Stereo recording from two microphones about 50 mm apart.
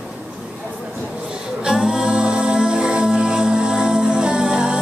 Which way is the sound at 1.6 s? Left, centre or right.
Centre.